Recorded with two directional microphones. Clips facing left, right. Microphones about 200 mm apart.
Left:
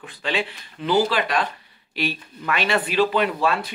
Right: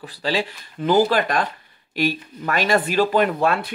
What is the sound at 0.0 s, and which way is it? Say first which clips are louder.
Speech: right 3 dB; 35° right (ahead or behind).